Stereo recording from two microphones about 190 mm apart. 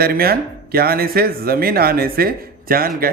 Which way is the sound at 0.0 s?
55° right (ahead or behind).